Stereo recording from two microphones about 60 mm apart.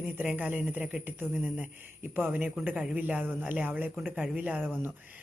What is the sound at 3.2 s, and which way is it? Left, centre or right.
Speech, right.